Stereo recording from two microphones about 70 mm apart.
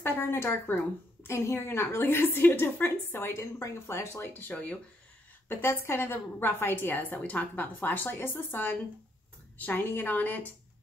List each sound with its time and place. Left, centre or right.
0.0 s a woman's voice: left
4.3 s a woman's voice: left
5.5 s a woman's voice: left